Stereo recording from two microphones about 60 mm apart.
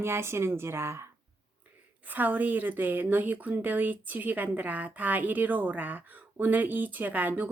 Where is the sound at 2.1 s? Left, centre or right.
Right.